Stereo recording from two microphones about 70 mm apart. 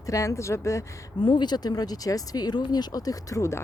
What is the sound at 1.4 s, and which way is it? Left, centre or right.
Speech, left.